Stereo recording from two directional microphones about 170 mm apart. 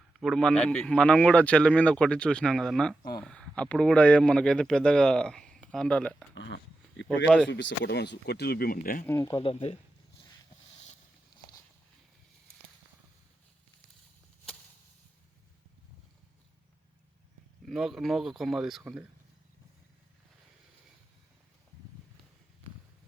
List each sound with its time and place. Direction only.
0.2 s speech: centre (ahead or behind)
6.3 s a sound: 90° left
7.4 s speech: 85° left; by 9.0 s 55° left (ahead or behind)
9.0 s speech: 20° left (ahead or behind)
17.7 s speech: centre (ahead or behind)